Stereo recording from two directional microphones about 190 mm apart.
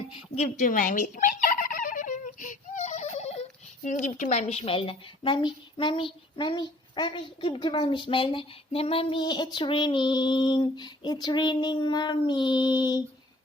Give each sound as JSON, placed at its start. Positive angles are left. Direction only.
{"t": 0.3, "sound": "chicken", "side_deg": 45}
{"t": 3.8, "sound": "a woman's voice", "side_deg": 40}